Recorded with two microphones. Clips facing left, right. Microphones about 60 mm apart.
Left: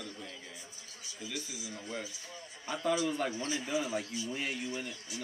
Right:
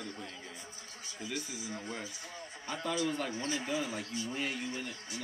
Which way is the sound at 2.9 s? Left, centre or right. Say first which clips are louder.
Left 2 dB; centre.